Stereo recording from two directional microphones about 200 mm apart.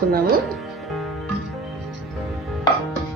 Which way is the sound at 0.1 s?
50° right (ahead or behind).